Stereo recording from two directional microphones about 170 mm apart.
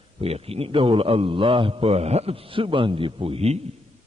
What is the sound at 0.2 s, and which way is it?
A man's voice, 35° right (ahead or behind).